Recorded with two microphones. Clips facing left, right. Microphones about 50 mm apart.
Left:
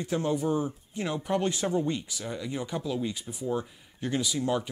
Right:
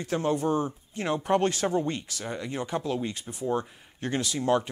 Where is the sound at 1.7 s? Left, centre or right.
Right.